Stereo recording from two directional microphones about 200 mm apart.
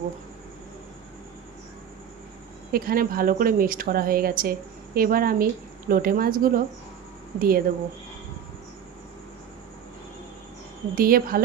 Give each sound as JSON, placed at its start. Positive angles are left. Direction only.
{"t": 2.7, "sound": "speech", "side_deg": -45}
{"t": 10.9, "sound": "speech", "side_deg": -45}